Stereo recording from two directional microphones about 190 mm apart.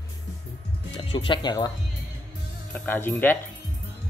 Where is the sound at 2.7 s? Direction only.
10° left (ahead or behind).